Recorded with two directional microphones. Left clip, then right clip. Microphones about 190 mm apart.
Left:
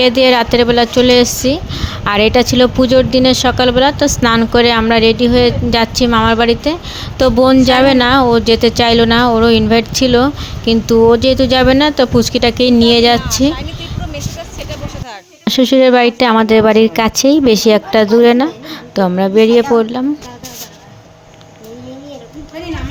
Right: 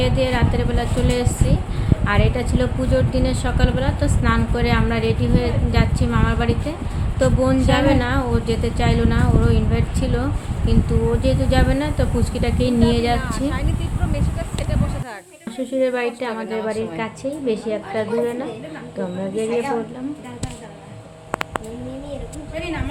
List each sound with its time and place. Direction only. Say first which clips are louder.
0.0 s a woman's voice: left 11 dB; 55° left (ahead or behind)
15.4 s a woman's voice: left 12 dB; 55° left (ahead or behind)